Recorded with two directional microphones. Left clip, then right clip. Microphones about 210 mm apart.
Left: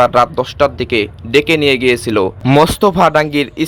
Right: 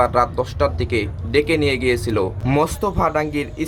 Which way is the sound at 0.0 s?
30° left (ahead or behind).